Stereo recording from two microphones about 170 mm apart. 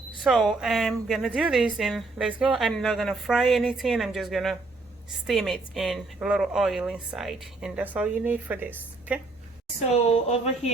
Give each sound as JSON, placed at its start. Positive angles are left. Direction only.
{"t": 0.3, "sound": "a woman's voice", "side_deg": 0}
{"t": 10.1, "sound": "speech", "side_deg": 40}